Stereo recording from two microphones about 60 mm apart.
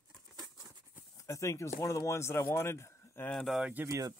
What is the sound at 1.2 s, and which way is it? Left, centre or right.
A man's voice, left.